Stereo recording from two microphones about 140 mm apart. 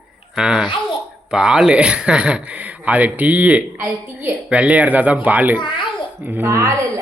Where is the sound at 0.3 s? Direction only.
5° right (ahead or behind).